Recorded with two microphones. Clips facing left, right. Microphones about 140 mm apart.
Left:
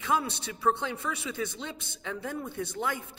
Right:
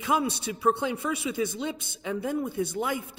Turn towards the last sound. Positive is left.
turn(degrees=-10)  # may be behind; listen again after turning